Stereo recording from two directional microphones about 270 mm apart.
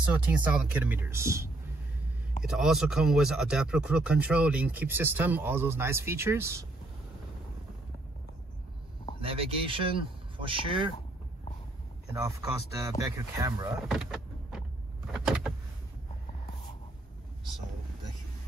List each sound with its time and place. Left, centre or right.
0.1 s speech: centre
9.2 s speech: right
12.1 s speech: centre
13.8 s power windows: centre